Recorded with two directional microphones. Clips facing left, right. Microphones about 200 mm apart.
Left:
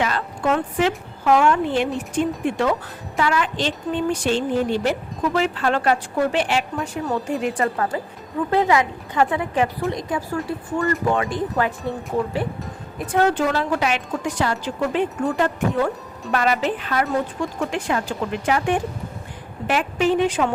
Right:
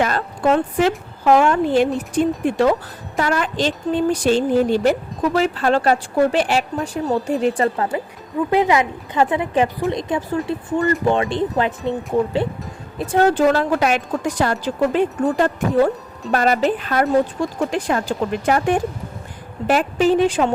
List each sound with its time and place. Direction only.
0.0 s a woman's voice: 40° right (ahead or behind)
7.4 s a woman's voice: 25° right (ahead or behind)
13.0 s a woman's voice: 35° right (ahead or behind)